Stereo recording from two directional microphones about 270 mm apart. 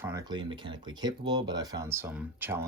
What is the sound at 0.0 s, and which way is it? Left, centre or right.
Speech, centre.